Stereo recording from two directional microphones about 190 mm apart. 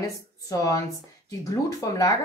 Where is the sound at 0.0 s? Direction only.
15° left (ahead or behind).